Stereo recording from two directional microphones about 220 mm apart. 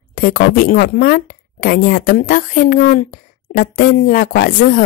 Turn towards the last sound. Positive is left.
turn(degrees=40)  # may be behind; listen again after turning